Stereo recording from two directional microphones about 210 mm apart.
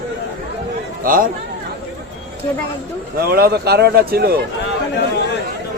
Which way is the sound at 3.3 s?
50° right (ahead or behind).